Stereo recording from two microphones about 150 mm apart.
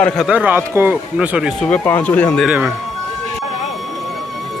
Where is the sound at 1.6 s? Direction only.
10° left (ahead or behind).